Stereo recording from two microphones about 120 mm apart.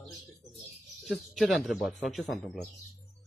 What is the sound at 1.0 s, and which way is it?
Speech, centre (ahead or behind).